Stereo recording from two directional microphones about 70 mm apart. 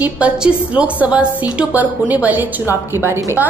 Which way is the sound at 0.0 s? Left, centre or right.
Centre.